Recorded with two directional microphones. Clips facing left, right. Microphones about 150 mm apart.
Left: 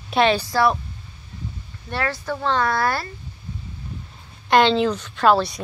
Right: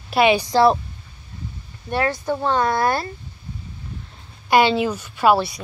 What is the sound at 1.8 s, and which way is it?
Speech, 20° right (ahead or behind).